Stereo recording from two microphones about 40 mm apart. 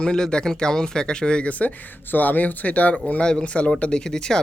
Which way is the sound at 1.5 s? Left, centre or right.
Left.